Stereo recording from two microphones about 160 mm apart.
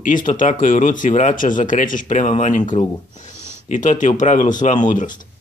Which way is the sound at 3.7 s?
50° left (ahead or behind).